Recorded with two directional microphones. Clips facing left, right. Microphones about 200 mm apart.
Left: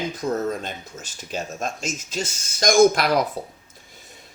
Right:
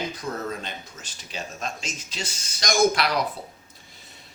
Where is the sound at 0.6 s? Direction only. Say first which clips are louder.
Left 4 dB; 45° left (ahead or behind).